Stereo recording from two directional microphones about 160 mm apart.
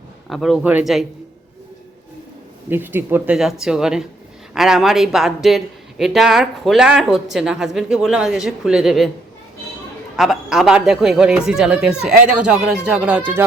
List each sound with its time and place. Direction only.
0.3 s a man's voice: centre (ahead or behind)
2.6 s a man's voice: 10° right (ahead or behind)
10.2 s a man's voice: centre (ahead or behind)